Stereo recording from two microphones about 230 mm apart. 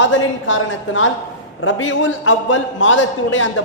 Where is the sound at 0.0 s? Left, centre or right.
Left.